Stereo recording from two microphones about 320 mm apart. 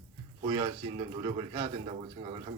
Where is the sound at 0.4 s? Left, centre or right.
Centre.